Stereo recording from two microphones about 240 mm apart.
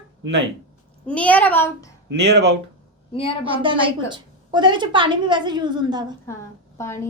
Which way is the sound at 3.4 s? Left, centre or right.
Right.